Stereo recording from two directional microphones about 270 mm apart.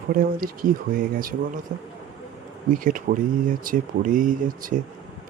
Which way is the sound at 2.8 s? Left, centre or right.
Right.